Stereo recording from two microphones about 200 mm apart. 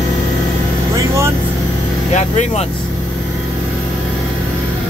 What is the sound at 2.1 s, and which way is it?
Speech, 35° left (ahead or behind).